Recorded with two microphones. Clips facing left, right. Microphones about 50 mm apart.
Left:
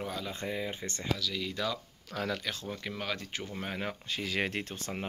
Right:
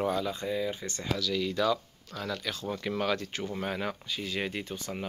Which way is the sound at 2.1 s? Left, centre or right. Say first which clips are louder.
Left 1 dB; left.